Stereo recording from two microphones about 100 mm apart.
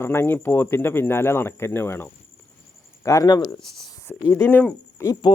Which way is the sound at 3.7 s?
45° left (ahead or behind).